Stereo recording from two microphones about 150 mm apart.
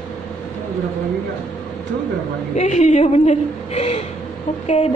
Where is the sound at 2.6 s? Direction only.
50° left (ahead or behind).